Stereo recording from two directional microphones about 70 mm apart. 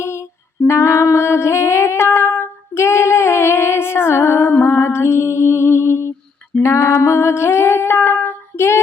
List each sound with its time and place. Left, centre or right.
0.0 s female singing: left
0.7 s music: left
6.6 s a sound: left